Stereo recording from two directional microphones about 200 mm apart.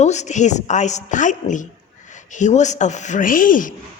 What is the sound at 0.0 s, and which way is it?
A woman's voice, 35° left (ahead or behind).